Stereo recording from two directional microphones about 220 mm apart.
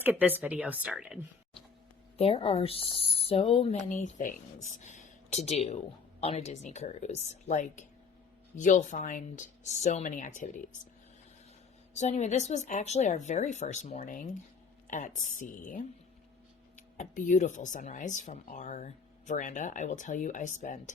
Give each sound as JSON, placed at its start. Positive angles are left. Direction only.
{"t": 0.0, "sound": "a woman's voice", "side_deg": -10}
{"t": 2.1, "sound": "a woman's voice", "side_deg": 25}
{"t": 11.9, "sound": "speech", "side_deg": 30}
{"t": 17.0, "sound": "speech", "side_deg": 35}